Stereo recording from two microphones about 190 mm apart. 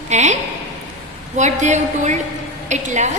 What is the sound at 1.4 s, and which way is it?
A woman's voice, 40° right (ahead or behind).